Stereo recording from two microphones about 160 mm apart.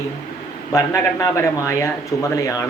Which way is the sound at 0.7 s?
15° left (ahead or behind).